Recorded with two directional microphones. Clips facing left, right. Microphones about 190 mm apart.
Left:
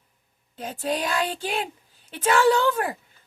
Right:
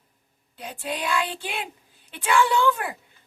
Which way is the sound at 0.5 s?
40° left (ahead or behind).